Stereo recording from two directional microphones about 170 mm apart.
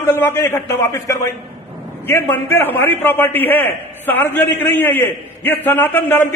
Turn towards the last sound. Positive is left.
turn(degrees=10)  # may be behind; listen again after turning